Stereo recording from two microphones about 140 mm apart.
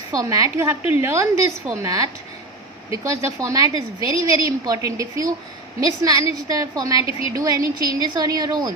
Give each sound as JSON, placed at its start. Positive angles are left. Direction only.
{"t": 0.1, "sound": "a woman's voice", "side_deg": -25}